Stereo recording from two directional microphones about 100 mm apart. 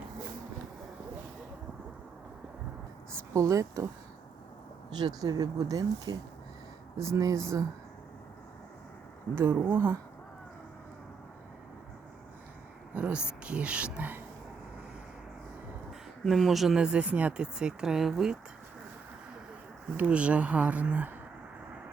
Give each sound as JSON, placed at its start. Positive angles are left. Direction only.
{"t": 3.3, "sound": "speech", "side_deg": -35}
{"t": 4.9, "sound": "speech", "side_deg": -45}
{"t": 9.3, "sound": "speech", "side_deg": -20}
{"t": 12.9, "sound": "speech", "side_deg": -15}
{"t": 16.2, "sound": "speech", "side_deg": 0}
{"t": 20.0, "sound": "speech", "side_deg": -15}